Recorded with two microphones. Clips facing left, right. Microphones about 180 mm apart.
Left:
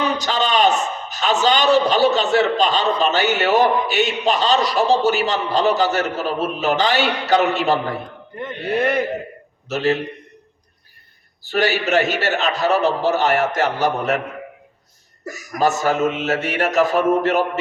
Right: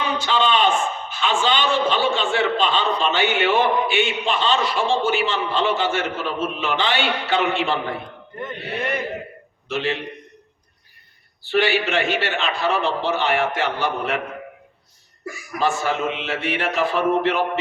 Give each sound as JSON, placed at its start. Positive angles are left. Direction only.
{"t": 0.0, "sound": "a man's voice", "side_deg": 40}
{"t": 9.6, "sound": "a man's voice", "side_deg": 40}
{"t": 11.4, "sound": "a man's voice", "side_deg": 40}
{"t": 15.2, "sound": "a man's voice", "side_deg": 40}